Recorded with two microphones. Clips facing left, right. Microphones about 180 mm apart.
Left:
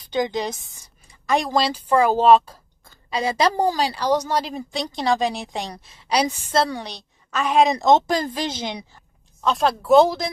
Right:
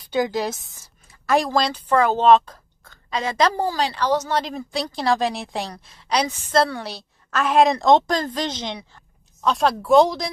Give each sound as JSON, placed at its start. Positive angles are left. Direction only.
{"t": 0.1, "sound": "a woman's voice", "side_deg": -5}
{"t": 6.3, "sound": "a woman's voice", "side_deg": 10}
{"t": 6.8, "sound": "a woman's voice", "side_deg": -5}